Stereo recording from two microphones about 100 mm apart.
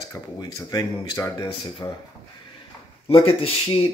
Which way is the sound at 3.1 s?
75° left (ahead or behind).